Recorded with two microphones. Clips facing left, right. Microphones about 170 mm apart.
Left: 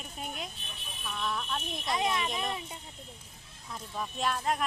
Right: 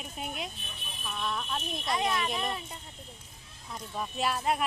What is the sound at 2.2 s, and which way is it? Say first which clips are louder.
Speech: right 1 dB; centre (ahead or behind).